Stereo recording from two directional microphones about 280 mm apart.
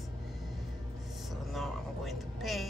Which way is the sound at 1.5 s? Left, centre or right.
Centre.